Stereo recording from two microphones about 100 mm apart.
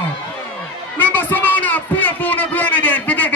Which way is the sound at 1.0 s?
20° left (ahead or behind).